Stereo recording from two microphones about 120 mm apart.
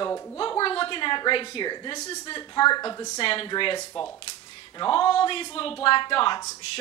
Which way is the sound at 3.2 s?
45° left (ahead or behind).